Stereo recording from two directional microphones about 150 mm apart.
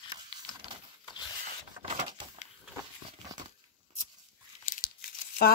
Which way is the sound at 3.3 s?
30° right (ahead or behind).